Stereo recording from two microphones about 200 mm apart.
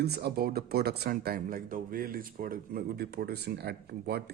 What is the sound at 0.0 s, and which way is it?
Speech, 55° right (ahead or behind).